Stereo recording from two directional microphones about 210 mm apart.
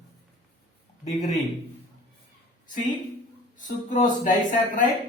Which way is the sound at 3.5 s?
35° left (ahead or behind).